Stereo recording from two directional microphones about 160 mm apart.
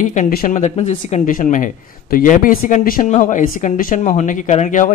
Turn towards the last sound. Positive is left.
turn(degrees=50)  # may be behind; listen again after turning